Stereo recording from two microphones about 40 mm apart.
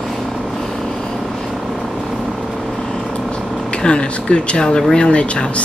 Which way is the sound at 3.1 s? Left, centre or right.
Left.